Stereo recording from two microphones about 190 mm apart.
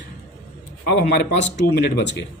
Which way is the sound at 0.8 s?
65° left (ahead or behind).